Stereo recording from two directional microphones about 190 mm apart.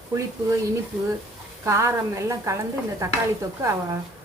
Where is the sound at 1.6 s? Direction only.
15° right (ahead or behind).